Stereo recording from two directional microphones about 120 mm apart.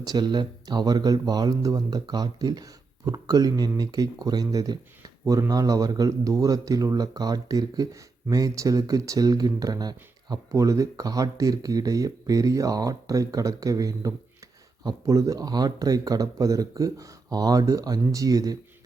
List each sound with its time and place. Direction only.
0.0 s speech: 35° right (ahead or behind)